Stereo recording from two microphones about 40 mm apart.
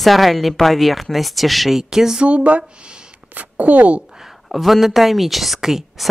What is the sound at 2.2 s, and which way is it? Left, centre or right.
A woman's voice, right.